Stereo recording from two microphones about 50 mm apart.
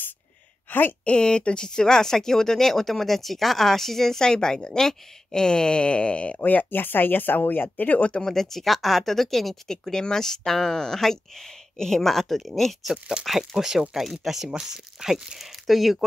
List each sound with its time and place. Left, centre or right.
0.7 s a woman's voice: left
1.0 s speech: centre
8.2 s speech: centre